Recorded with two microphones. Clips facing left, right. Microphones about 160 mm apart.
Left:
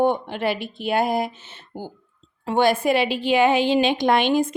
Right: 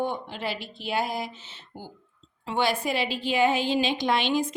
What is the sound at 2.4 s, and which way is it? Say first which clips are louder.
A woman's voice: left 7 dB; 50° left (ahead or behind).